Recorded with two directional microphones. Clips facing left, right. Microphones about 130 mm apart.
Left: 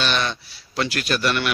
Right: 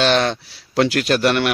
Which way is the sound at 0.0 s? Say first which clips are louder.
Right 7 dB; 90° right.